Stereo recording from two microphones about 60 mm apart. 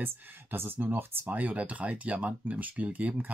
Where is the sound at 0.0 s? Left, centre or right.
Right.